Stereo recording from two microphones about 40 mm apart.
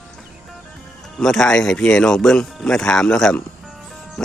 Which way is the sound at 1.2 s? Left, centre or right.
Centre.